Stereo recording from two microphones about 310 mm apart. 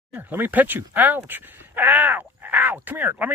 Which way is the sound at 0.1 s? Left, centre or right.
Centre.